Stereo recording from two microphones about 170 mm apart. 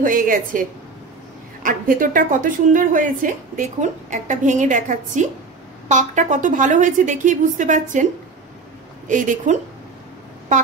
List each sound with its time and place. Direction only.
0.0 s a woman's voice: 50° right (ahead or behind)